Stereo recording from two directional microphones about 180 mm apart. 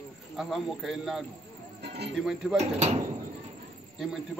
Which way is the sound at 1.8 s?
65° right (ahead or behind).